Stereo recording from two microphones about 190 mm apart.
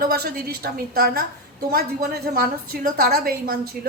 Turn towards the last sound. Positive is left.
turn(degrees=-55)  # may be behind; listen again after turning